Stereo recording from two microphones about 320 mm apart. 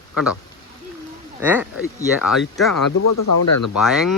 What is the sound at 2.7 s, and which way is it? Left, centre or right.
Speech, left.